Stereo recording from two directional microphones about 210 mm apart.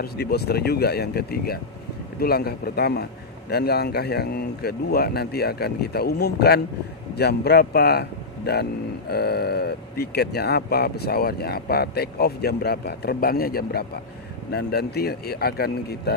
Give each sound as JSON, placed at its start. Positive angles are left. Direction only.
{"t": 0.0, "sound": "speech", "side_deg": 50}